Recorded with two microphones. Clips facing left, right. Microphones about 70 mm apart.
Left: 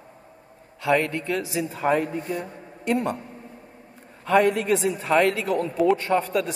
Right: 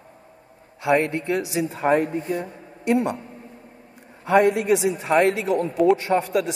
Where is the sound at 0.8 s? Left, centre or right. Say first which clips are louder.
Right 2 dB; right.